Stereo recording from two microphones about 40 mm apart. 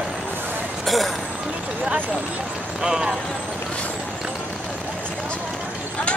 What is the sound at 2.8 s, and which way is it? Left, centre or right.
Speech, centre.